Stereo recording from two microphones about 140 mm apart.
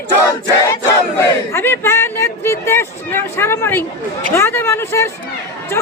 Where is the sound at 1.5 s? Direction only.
15° left (ahead or behind).